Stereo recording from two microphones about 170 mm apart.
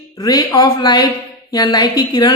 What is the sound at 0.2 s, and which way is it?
A woman's voice, 20° left (ahead or behind).